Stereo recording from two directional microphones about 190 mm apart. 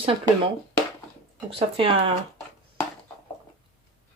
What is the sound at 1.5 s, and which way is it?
Speech, 30° right (ahead or behind).